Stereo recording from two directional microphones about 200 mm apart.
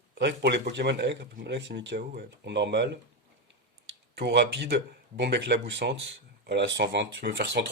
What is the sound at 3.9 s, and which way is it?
Speech, 55° right (ahead or behind).